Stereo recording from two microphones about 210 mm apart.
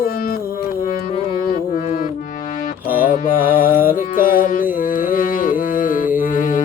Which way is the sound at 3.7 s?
10° right (ahead or behind).